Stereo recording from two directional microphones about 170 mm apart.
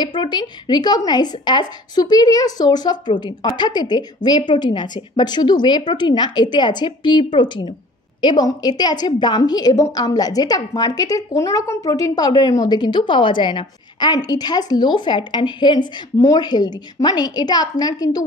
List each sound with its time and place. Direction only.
0.0 s a woman's voice: 25° left (ahead or behind)